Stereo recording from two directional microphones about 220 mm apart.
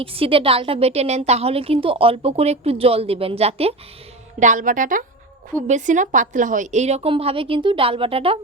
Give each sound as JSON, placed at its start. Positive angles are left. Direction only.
{"t": 0.0, "sound": "a woman's voice", "side_deg": -25}